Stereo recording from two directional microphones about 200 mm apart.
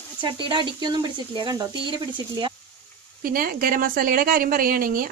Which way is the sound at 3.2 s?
45° right (ahead or behind).